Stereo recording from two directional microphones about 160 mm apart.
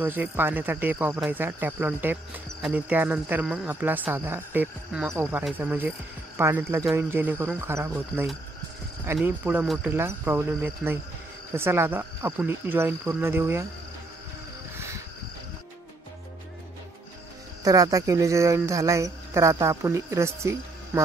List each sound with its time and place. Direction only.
0.0 s cricket: 10° right (ahead or behind)
5.1 s speech: 20° right (ahead or behind)
5.6 s cricket: 10° right (ahead or behind)
17.6 s speech: 20° right (ahead or behind)